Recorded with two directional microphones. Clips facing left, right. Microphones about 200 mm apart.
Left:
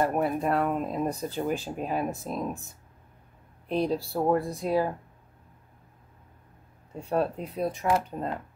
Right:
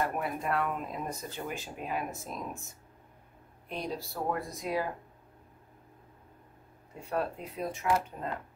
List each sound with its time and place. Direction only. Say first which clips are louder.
0.0 s speech: left 7 dB; 35° left (ahead or behind)
3.6 s speech: left 10 dB; 30° left (ahead or behind)
7.1 s speech: left 6 dB; 35° left (ahead or behind)